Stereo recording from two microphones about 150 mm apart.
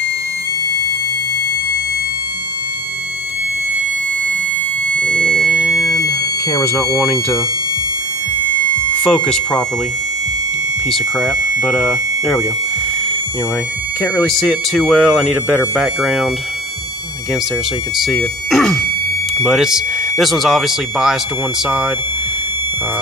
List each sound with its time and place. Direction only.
5.0 s a sound: 10° left (ahead or behind)
5.9 s smoke detector: 20° left (ahead or behind)
9.0 s speech: 5° left (ahead or behind)
10.9 s speech: centre (ahead or behind)
14.2 s speech: 5° left (ahead or behind)
17.9 s speech: centre (ahead or behind)